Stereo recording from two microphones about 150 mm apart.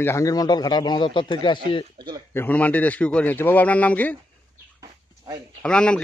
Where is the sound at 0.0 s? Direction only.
20° left (ahead or behind).